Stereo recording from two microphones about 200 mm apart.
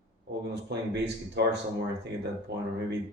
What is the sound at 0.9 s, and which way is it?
Speech, 60° right (ahead or behind).